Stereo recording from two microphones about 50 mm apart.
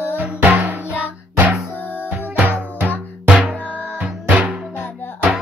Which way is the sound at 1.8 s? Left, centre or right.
Left.